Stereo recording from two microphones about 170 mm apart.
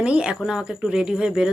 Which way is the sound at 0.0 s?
5° right (ahead or behind).